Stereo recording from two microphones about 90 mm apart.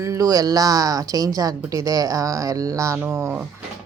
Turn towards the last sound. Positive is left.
turn(degrees=-25)  # may be behind; listen again after turning